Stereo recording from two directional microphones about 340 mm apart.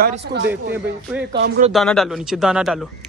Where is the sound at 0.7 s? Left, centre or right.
Centre.